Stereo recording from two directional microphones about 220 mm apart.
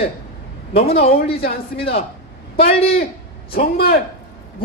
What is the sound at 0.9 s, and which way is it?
Speech, 45° left (ahead or behind).